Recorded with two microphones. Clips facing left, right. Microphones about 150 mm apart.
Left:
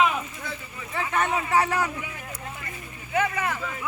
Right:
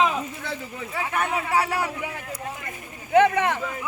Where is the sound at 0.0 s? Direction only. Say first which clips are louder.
Right 1 dB; 20° right (ahead or behind).